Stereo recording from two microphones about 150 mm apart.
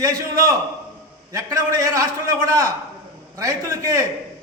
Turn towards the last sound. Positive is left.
turn(degrees=-20)  # may be behind; listen again after turning